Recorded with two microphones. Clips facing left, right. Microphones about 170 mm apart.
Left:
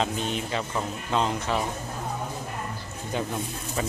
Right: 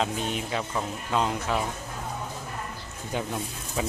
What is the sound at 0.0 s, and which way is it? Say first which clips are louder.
Speech: left 1 dB; 5° right (ahead or behind).